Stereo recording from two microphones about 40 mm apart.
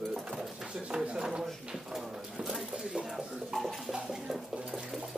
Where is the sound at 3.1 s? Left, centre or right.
Centre.